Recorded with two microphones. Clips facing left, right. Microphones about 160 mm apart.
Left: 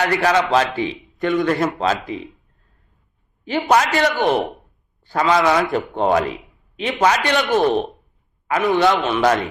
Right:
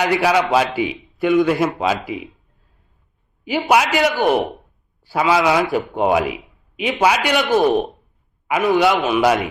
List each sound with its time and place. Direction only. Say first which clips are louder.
0.0 s a man's voice: right 1 dB; 15° right (ahead or behind)
3.4 s a man's voice: even; 10° right (ahead or behind)